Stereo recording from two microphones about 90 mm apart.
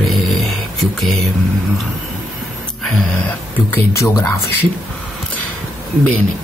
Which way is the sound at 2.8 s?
5° left (ahead or behind).